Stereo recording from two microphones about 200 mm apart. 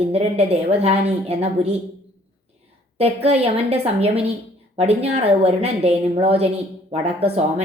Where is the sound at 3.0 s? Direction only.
30° right (ahead or behind).